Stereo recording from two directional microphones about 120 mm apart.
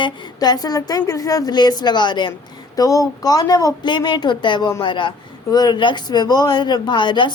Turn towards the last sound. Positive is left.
turn(degrees=40)  # may be behind; listen again after turning